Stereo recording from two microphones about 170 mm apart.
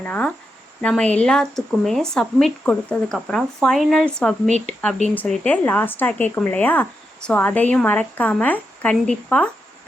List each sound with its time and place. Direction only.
0.0 s speech: 10° left (ahead or behind)
4.4 s speech: 45° right (ahead or behind)
5.1 s speech: 5° left (ahead or behind)